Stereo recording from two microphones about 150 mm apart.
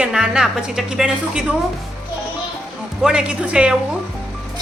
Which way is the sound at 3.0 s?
5° right (ahead or behind).